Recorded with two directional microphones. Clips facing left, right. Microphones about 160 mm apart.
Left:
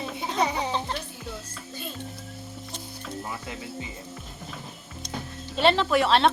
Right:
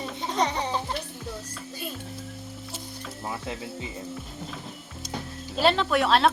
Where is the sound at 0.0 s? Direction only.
5° left (ahead or behind).